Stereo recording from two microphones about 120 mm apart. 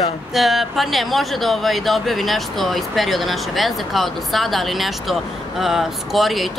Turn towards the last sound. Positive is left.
turn(degrees=0)  # may be behind; listen again after turning